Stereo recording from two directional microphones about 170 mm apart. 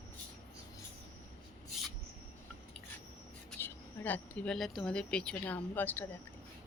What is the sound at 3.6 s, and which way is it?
Speech, 10° left (ahead or behind).